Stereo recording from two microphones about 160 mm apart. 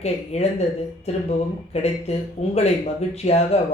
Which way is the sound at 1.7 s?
40° left (ahead or behind).